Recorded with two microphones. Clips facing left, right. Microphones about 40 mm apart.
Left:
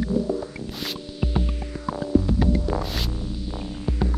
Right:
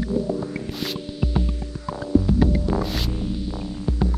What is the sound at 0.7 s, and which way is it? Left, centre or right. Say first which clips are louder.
Music: right 3 dB; centre.